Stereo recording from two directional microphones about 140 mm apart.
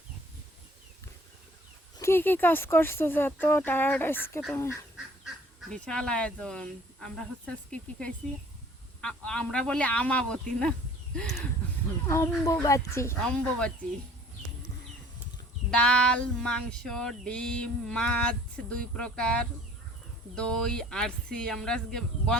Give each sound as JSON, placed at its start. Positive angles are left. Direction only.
{"t": 2.0, "sound": "female singing", "side_deg": 15}
{"t": 4.5, "sound": "speech", "side_deg": 20}
{"t": 5.5, "sound": "female singing", "side_deg": 5}
{"t": 12.0, "sound": "speech", "side_deg": 20}
{"t": 13.2, "sound": "speech", "side_deg": 5}
{"t": 15.7, "sound": "female singing", "side_deg": 5}
{"t": 20.3, "sound": "speech", "side_deg": 5}